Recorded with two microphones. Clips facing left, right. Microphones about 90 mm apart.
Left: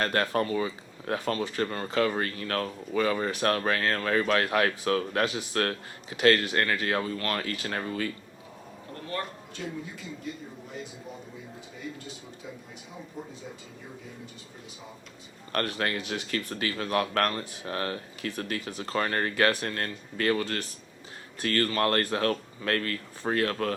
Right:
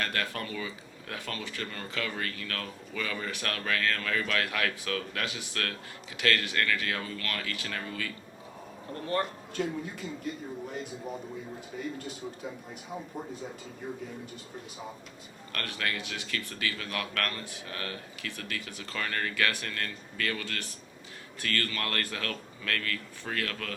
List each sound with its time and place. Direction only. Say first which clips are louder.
0.0 s speech: left 7 dB; 35° left (ahead or behind)
8.9 s speech: right 4 dB; 35° right (ahead or behind)
9.6 s speech: right 5 dB; 50° right (ahead or behind)
15.5 s speech: left 5 dB; 35° left (ahead or behind)